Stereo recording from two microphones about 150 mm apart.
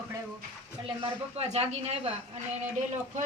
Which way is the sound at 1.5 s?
45° right (ahead or behind).